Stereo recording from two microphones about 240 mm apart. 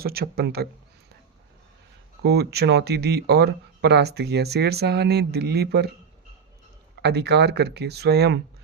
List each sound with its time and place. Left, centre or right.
0.0 s speech: right
2.2 s speech: right
7.0 s speech: right